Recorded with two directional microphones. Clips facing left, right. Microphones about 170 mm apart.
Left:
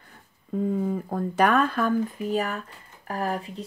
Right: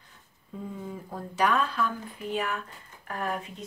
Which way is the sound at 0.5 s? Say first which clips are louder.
Left 12 dB; 55° left (ahead or behind).